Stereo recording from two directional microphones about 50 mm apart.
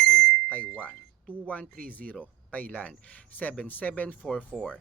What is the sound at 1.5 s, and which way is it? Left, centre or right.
Speech, left.